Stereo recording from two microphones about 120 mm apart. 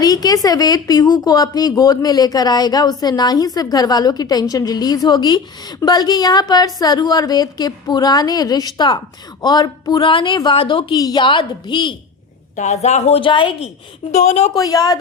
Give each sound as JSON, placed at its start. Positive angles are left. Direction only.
{"t": 0.0, "sound": "a woman's voice", "side_deg": 30}
{"t": 10.9, "sound": "a woman's voice", "side_deg": 35}
{"t": 12.5, "sound": "a woman's voice", "side_deg": 70}
{"t": 13.2, "sound": "a woman's voice", "side_deg": 45}
{"t": 14.1, "sound": "a woman's voice", "side_deg": 70}
{"t": 14.5, "sound": "a woman's voice", "side_deg": 30}